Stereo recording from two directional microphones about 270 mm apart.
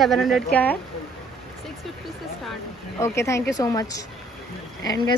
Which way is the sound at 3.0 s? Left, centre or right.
Centre.